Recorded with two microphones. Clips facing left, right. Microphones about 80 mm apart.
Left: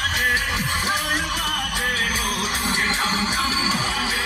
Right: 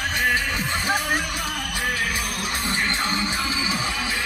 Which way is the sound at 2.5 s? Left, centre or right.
Centre.